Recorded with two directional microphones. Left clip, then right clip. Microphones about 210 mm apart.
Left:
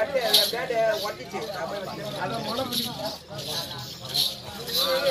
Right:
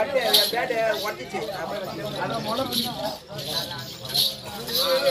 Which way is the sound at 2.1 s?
10° left (ahead or behind).